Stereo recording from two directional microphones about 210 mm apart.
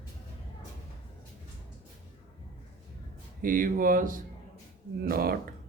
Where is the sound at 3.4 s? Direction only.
40° right (ahead or behind).